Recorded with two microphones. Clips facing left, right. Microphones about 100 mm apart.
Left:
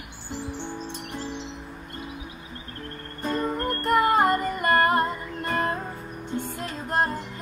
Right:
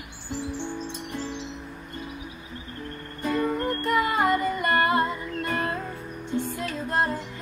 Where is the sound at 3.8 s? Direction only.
45° left (ahead or behind).